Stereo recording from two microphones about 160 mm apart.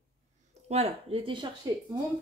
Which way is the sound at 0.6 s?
40° right (ahead or behind).